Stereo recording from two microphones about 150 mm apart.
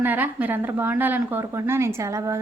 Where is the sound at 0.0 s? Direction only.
10° right (ahead or behind).